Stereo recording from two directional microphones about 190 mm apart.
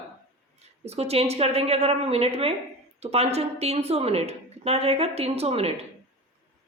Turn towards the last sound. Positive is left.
turn(degrees=-35)  # may be behind; listen again after turning